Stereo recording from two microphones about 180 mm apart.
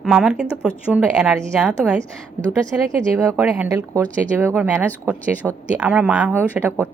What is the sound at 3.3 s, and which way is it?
A woman's voice, 10° right (ahead or behind).